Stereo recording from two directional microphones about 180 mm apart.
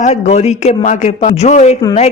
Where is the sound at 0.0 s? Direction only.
40° left (ahead or behind).